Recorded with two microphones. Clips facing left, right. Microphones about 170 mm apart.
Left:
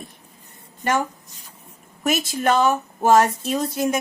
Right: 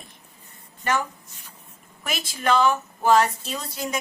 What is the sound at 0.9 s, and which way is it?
Speech, 45° left (ahead or behind).